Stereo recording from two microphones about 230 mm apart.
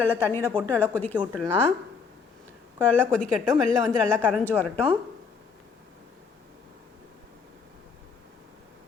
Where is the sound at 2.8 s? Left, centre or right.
Centre.